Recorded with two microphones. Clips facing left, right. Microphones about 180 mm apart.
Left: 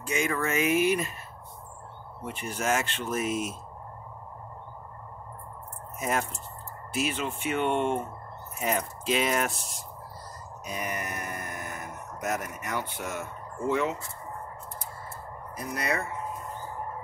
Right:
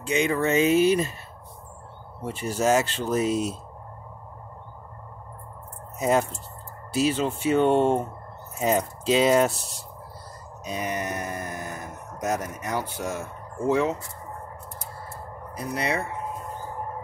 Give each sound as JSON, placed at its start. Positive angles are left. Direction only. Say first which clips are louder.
{"t": 0.1, "sound": "speech", "louder": "right 6 dB", "side_deg": -25}
{"t": 2.2, "sound": "speech", "louder": "right 6 dB", "side_deg": -35}
{"t": 5.9, "sound": "speech", "louder": "right 7 dB", "side_deg": -30}
{"t": 10.7, "sound": "speech", "louder": "right 5 dB", "side_deg": -30}
{"t": 15.5, "sound": "speech", "louder": "right 3 dB", "side_deg": -30}